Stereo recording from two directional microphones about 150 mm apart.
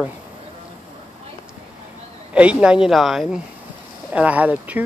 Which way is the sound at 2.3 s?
5° right (ahead or behind).